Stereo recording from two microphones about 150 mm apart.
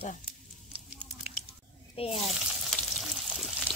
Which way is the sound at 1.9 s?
40° left (ahead or behind).